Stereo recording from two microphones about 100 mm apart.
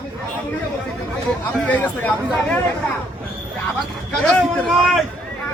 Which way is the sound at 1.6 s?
15° left (ahead or behind).